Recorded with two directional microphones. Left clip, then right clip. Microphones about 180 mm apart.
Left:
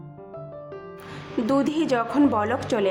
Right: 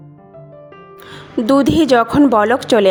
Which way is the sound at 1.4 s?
40° right (ahead or behind).